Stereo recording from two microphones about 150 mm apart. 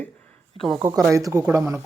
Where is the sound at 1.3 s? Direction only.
20° right (ahead or behind).